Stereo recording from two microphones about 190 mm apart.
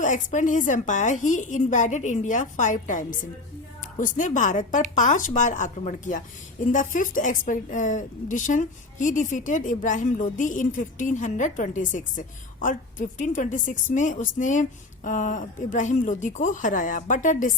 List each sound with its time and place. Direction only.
0.0 s a woman's voice: 40° left (ahead or behind)